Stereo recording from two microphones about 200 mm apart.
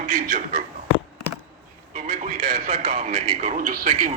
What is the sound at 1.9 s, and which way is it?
Speech, 40° right (ahead or behind).